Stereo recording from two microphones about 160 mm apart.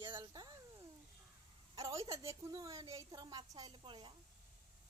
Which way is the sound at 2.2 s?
20° right (ahead or behind).